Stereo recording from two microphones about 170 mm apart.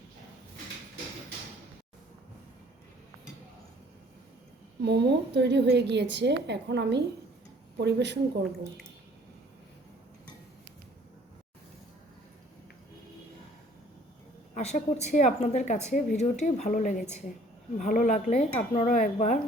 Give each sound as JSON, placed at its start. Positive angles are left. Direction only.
{"t": 4.8, "sound": "a woman's voice", "side_deg": -80}
{"t": 14.5, "sound": "a woman's voice", "side_deg": 40}